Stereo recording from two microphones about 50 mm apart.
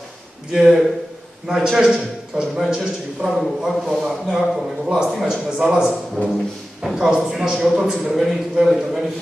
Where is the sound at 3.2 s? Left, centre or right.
Centre.